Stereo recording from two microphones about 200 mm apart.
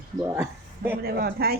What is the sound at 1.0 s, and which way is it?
Speech, 50° right (ahead or behind).